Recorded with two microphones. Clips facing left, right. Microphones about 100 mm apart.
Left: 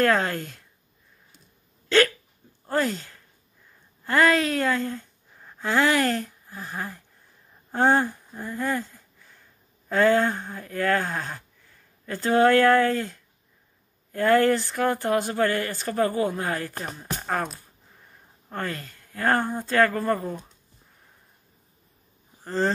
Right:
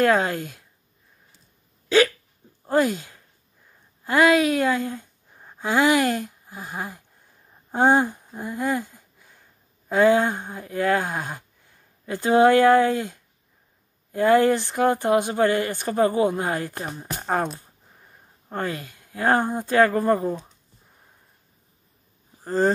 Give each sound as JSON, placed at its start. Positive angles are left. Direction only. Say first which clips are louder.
{"t": 0.0, "sound": "speech", "louder": "right 2 dB", "side_deg": -15}
{"t": 1.9, "sound": "speech", "louder": "right 2 dB", "side_deg": -10}
{"t": 22.4, "sound": "a sound", "louder": "right 4 dB", "side_deg": -15}